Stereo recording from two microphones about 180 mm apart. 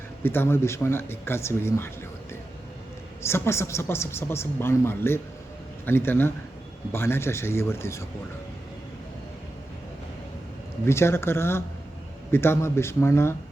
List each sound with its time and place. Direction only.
0.2 s speech: 10° left (ahead or behind)
3.2 s speech: 15° left (ahead or behind)
10.8 s speech: 15° left (ahead or behind)